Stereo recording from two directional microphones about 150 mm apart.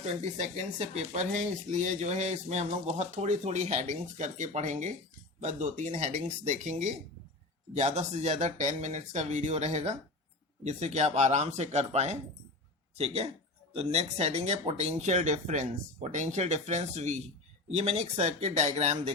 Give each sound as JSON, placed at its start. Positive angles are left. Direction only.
{"t": 0.0, "sound": "speech", "side_deg": -50}